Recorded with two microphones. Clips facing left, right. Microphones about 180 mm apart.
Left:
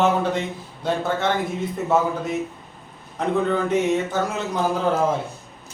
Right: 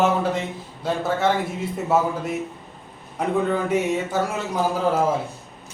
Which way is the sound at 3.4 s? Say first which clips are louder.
Left 1 dB; 10° right (ahead or behind).